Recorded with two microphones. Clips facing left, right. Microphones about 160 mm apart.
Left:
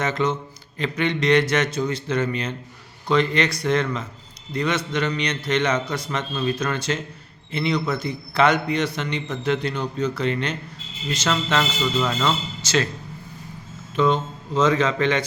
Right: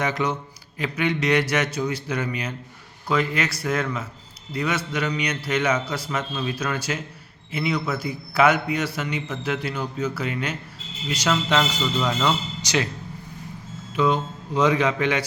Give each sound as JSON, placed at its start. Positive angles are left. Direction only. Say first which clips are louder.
{"t": 0.0, "sound": "a man's voice", "louder": "left 2 dB", "side_deg": -10}
{"t": 13.9, "sound": "a man's voice", "louder": "left 1 dB", "side_deg": -10}